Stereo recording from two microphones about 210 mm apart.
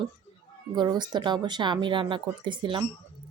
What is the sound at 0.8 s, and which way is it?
A woman's voice, 20° right (ahead or behind).